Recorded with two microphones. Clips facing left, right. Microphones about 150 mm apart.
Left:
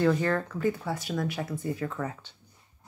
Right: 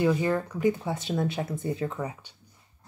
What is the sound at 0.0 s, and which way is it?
Speech, 10° right (ahead or behind).